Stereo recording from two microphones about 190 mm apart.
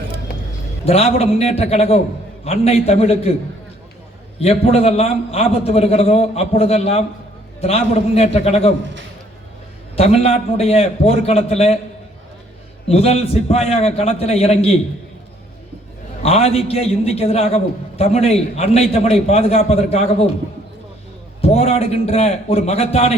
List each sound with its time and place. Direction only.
0.9 s a man's voice: 30° left (ahead or behind)
4.4 s a man's voice: 30° left (ahead or behind)
10.0 s a man's voice: 30° left (ahead or behind)
12.9 s a man's voice: 30° left (ahead or behind)
16.2 s a man's voice: 30° left (ahead or behind)
21.4 s a man's voice: 30° left (ahead or behind)